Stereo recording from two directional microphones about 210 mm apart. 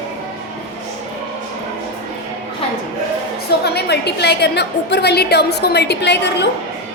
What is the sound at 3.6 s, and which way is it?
A woman's voice, 50° left (ahead or behind).